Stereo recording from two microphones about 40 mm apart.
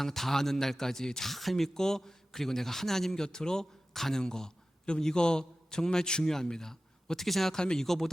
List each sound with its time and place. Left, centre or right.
0.0 s a man's voice: centre
1.3 s a man's voice: centre
7.6 s speech: centre
7.9 s a man's voice: centre